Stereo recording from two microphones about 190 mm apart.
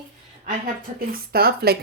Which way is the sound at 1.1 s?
55° right (ahead or behind).